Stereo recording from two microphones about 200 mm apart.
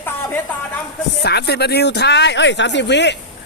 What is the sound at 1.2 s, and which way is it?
Speech, 55° left (ahead or behind).